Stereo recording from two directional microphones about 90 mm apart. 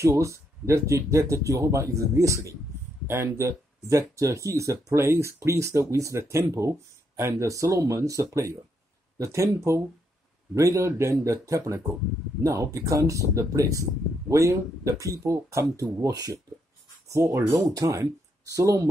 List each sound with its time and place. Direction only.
0.0 s speech: 35° right (ahead or behind)
17.1 s speech: 35° right (ahead or behind)